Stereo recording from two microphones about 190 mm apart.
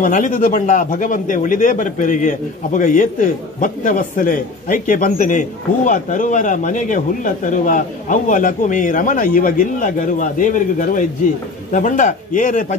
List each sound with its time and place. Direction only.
0.0 s speech: 40° left (ahead or behind)